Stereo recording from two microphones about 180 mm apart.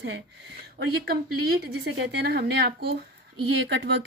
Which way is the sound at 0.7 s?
60° right (ahead or behind).